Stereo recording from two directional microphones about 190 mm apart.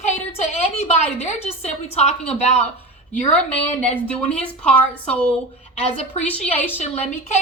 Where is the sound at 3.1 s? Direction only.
5° left (ahead or behind).